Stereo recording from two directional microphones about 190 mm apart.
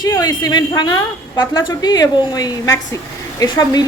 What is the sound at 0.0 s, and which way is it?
A woman's voice, 20° left (ahead or behind).